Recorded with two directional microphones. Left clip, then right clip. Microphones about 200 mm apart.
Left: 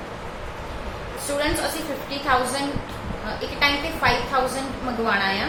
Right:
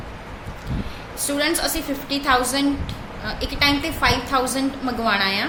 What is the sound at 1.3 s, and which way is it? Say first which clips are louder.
A woman's voice: right 2 dB; 55° right (ahead or behind).